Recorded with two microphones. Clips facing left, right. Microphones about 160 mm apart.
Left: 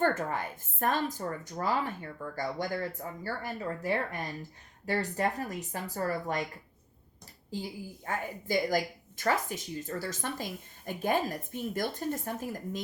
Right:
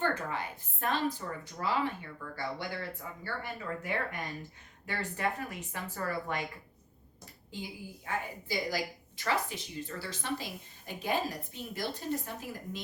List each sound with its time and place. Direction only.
0.0 s a woman's voice: 45° left (ahead or behind)
8.0 s a woman's voice: 50° left (ahead or behind)